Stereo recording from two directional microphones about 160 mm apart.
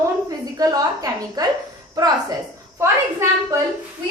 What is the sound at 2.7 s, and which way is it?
Speech, 15° right (ahead or behind).